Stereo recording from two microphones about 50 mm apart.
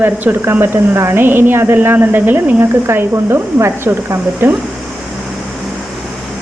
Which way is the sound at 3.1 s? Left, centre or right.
Right.